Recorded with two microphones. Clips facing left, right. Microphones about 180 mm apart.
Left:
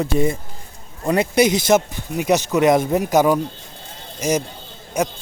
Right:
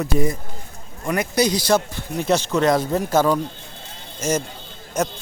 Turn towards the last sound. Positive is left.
turn(degrees=10)  # may be behind; listen again after turning